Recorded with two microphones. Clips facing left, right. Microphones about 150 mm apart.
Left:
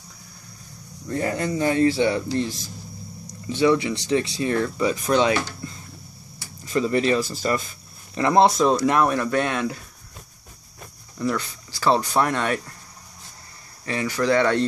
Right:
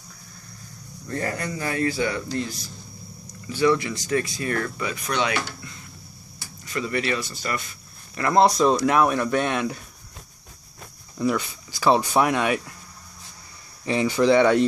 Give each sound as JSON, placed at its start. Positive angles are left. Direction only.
{"t": 1.0, "sound": "speech", "side_deg": 15}
{"t": 3.4, "sound": "speech", "side_deg": 20}
{"t": 8.1, "sound": "speech", "side_deg": 20}
{"t": 8.5, "sound": "speech", "side_deg": 5}
{"t": 11.1, "sound": "speech", "side_deg": -15}
{"t": 13.8, "sound": "speech", "side_deg": -20}